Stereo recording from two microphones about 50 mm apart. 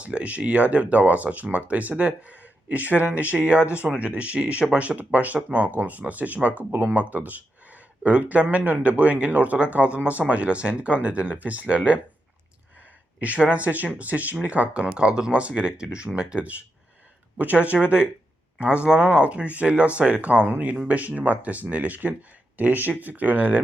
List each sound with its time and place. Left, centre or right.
0.0 s speech: right
13.1 s speech: right